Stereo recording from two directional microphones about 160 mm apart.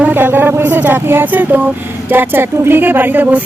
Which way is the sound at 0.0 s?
10° right (ahead or behind).